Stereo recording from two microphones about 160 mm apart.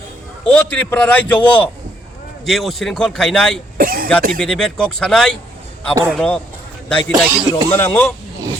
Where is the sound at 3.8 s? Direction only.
65° right (ahead or behind).